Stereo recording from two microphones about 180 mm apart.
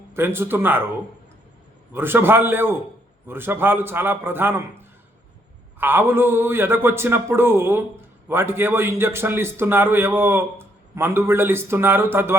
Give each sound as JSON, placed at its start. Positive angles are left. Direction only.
{"t": 0.1, "sound": "a man's voice", "side_deg": -15}
{"t": 1.9, "sound": "a man's voice", "side_deg": -10}